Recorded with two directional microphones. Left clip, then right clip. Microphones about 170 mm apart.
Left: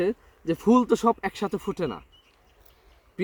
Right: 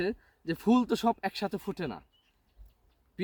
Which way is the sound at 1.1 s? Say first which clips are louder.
Left 5 dB; 30° right (ahead or behind).